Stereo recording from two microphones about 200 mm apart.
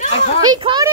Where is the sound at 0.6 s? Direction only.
25° right (ahead or behind).